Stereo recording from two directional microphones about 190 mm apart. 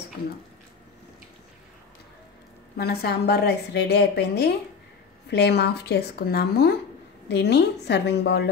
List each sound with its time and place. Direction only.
2.8 s a woman's voice: 55° left (ahead or behind)